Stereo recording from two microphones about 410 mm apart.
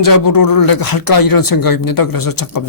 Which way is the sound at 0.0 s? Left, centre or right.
Left.